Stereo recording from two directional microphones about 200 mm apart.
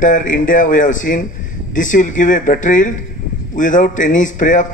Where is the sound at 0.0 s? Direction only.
40° left (ahead or behind).